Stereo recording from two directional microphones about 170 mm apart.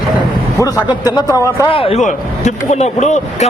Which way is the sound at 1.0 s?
20° left (ahead or behind).